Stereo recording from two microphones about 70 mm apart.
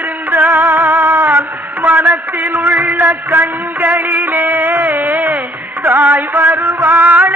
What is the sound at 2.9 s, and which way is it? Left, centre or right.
Music, right.